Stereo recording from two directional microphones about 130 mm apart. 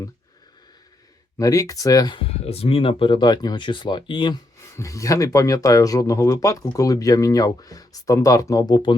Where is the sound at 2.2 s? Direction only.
50° left (ahead or behind).